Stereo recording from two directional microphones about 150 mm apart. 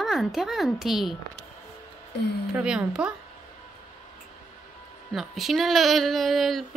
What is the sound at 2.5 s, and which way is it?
Speech, 5° right (ahead or behind).